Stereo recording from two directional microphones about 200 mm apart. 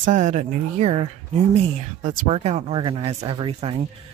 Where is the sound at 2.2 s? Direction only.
35° right (ahead or behind).